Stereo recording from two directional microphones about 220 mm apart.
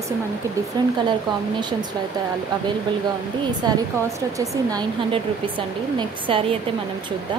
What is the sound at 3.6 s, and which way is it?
A woman's voice, 20° right (ahead or behind).